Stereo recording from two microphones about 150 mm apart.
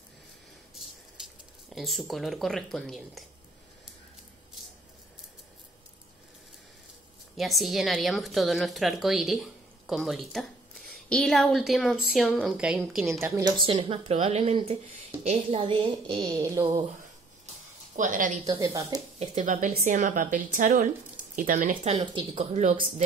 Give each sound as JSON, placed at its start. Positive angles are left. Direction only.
{"t": 1.2, "sound": "a sound", "side_deg": -5}
{"t": 1.8, "sound": "a woman's voice", "side_deg": 0}
{"t": 7.3, "sound": "a woman's voice", "side_deg": 0}
{"t": 13.6, "sound": "speech", "side_deg": -35}
{"t": 16.2, "sound": "a sound", "side_deg": -20}
{"t": 17.9, "sound": "a woman's voice", "side_deg": -60}
{"t": 18.4, "sound": "a sound", "side_deg": -25}
{"t": 19.1, "sound": "a woman's voice", "side_deg": -45}
{"t": 21.8, "sound": "a woman's voice", "side_deg": -35}